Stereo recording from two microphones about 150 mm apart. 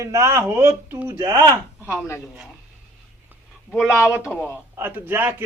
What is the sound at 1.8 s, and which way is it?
Speech, 15° left (ahead or behind).